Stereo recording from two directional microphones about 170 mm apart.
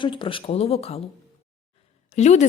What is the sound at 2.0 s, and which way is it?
Speech, 40° left (ahead or behind).